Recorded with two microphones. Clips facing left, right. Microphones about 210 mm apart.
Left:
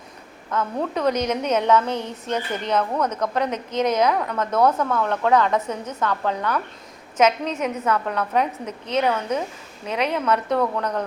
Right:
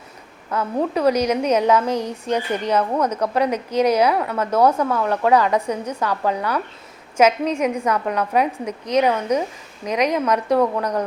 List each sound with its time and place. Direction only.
0.5 s a woman's voice: 10° right (ahead or behind)
1.9 s speech: 35° right (ahead or behind)
2.2 s a woman's voice: 10° right (ahead or behind)